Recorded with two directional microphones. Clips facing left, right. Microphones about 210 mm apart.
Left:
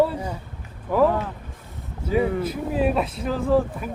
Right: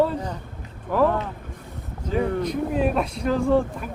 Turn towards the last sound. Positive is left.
turn(degrees=0)  # may be behind; listen again after turning